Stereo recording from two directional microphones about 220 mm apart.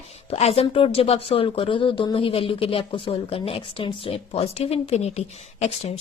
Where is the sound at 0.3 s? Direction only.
25° left (ahead or behind).